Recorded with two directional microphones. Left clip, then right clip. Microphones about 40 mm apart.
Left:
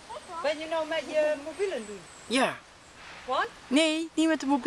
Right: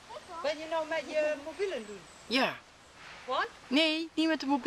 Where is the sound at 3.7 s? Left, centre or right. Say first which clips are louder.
Left 3 dB; centre.